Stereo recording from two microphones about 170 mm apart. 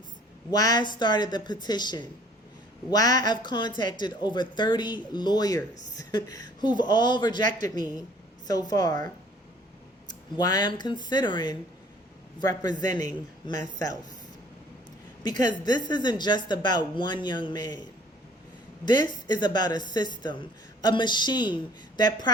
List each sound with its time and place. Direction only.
0.5 s speech: 25° left (ahead or behind)
10.3 s speech: 25° left (ahead or behind)
15.2 s speech: 25° left (ahead or behind)
18.9 s speech: 25° left (ahead or behind)